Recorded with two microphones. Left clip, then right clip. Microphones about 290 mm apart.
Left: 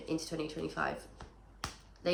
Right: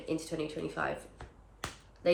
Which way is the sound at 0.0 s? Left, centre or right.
Centre.